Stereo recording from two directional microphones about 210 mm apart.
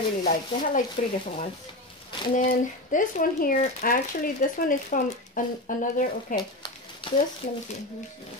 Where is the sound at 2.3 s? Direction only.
40° left (ahead or behind).